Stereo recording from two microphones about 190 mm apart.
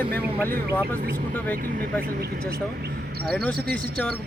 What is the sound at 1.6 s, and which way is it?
Speech, 50° right (ahead or behind).